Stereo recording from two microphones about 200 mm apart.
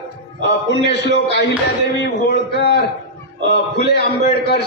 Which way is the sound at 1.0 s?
60° left (ahead or behind).